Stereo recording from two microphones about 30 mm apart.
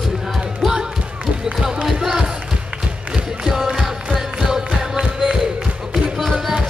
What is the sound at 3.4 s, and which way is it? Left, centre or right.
Music, centre.